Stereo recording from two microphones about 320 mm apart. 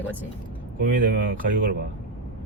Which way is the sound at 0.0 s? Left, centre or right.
Centre.